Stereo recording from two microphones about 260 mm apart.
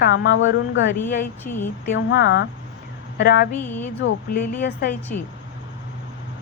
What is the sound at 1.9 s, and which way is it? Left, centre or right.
A woman's voice, left.